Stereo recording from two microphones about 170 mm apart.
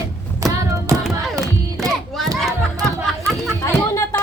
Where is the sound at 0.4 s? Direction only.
20° right (ahead or behind).